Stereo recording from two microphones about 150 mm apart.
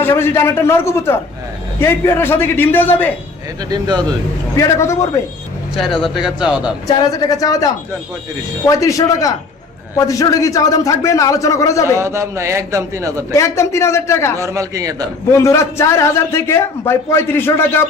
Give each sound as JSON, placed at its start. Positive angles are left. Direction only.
{"t": 0.0, "sound": "a man's voice", "side_deg": 15}
{"t": 3.7, "sound": "a man's voice", "side_deg": -30}
{"t": 4.5, "sound": "a man's voice", "side_deg": 20}
{"t": 5.7, "sound": "speech", "side_deg": 0}
{"t": 6.8, "sound": "a man's voice", "side_deg": 25}
{"t": 11.9, "sound": "a man's voice", "side_deg": -20}
{"t": 13.3, "sound": "a man's voice", "side_deg": 20}
{"t": 14.3, "sound": "a man's voice", "side_deg": -20}
{"t": 15.3, "sound": "a man's voice", "side_deg": 20}